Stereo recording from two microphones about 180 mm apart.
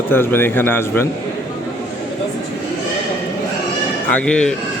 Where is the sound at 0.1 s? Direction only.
10° left (ahead or behind).